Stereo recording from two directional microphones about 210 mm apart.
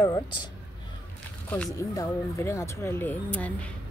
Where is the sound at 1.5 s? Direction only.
10° left (ahead or behind).